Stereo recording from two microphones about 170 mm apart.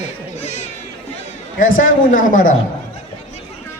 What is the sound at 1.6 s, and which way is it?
Speech, 50° left (ahead or behind).